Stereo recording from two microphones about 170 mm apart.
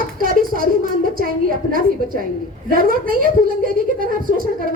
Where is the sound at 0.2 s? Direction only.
55° right (ahead or behind).